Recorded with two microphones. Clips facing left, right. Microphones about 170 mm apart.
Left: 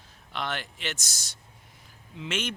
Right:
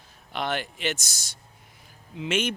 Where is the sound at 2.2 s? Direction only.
10° right (ahead or behind).